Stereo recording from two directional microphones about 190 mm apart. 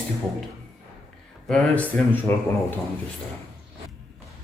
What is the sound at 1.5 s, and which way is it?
Speech, centre (ahead or behind).